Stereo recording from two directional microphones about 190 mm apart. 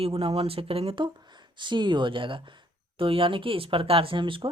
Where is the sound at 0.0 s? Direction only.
30° right (ahead or behind).